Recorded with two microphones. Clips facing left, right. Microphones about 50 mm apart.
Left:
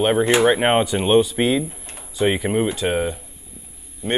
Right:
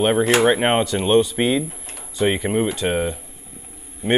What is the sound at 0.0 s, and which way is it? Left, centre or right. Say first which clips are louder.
Speech: even; centre.